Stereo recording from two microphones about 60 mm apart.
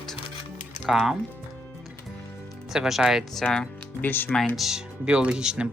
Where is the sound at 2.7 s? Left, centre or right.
Centre.